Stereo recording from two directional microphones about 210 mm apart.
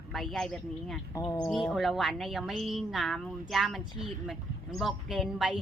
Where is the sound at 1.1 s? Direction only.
20° left (ahead or behind).